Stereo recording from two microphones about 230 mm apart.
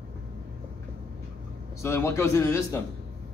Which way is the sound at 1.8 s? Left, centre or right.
Centre.